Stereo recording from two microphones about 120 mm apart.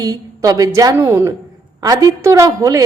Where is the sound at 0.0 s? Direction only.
30° right (ahead or behind).